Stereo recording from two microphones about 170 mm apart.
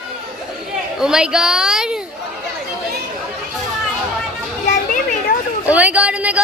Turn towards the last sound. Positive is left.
turn(degrees=-5)  # may be behind; listen again after turning